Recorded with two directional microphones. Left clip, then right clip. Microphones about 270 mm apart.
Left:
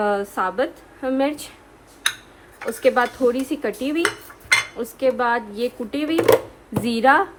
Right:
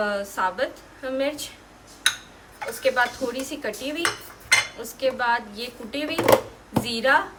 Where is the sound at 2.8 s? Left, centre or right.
Centre.